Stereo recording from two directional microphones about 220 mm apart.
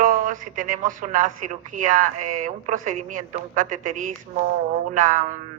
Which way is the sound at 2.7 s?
35° right (ahead or behind).